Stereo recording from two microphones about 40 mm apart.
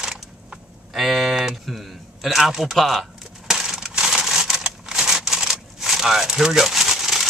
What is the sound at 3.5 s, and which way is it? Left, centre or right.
Crushing, centre.